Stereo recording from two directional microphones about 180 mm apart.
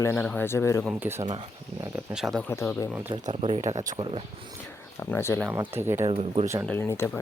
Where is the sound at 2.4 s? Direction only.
15° left (ahead or behind).